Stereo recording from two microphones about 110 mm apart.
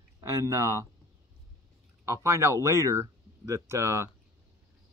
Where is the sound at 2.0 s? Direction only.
25° right (ahead or behind).